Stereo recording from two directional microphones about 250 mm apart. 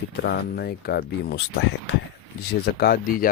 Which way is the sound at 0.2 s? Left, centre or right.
Left.